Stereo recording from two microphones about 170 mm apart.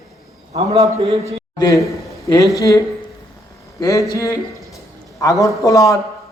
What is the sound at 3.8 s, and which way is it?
A man's voice, 20° left (ahead or behind).